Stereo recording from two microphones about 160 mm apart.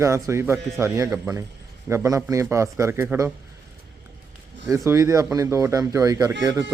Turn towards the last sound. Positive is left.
turn(degrees=-20)  # may be behind; listen again after turning